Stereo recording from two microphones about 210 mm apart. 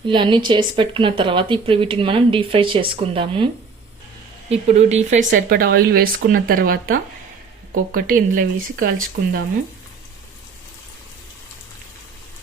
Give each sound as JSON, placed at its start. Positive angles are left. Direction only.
{"t": 0.0, "sound": "speech", "side_deg": -20}
{"t": 5.5, "sound": "speech", "side_deg": -45}